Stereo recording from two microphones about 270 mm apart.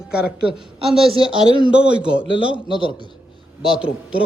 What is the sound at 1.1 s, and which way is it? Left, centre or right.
Speech, centre.